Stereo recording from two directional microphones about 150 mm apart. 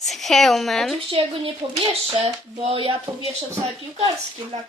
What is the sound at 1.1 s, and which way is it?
Speech, 40° right (ahead or behind).